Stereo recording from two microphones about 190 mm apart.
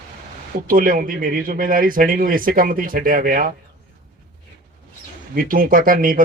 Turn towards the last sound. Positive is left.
turn(degrees=-50)  # may be behind; listen again after turning